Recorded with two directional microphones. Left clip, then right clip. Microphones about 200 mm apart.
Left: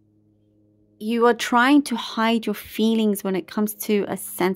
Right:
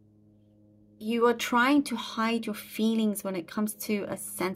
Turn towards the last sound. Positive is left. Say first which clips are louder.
# left 9 dB
turn(degrees=45)  # may be behind; listen again after turning